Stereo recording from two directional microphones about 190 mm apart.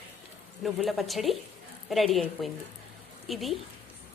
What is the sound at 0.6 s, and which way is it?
A woman's voice, centre (ahead or behind).